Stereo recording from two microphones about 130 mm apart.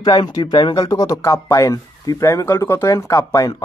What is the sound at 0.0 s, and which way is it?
Speech, 35° left (ahead or behind).